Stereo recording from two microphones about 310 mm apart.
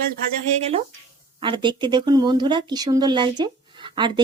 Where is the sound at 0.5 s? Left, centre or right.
Right.